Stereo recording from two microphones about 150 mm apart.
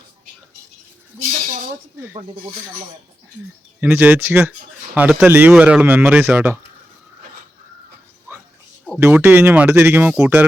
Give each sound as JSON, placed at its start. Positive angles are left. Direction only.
{"t": 3.8, "sound": "speech", "side_deg": -10}
{"t": 8.3, "sound": "a sound", "side_deg": -15}
{"t": 9.0, "sound": "speech", "side_deg": -15}